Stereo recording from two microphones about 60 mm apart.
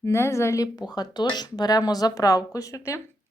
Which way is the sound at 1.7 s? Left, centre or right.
Left.